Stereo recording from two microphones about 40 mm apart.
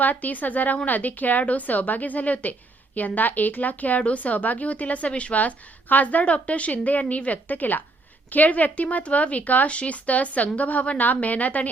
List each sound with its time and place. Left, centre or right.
0.0 s a woman's voice: left
9.6 s a woman's voice: left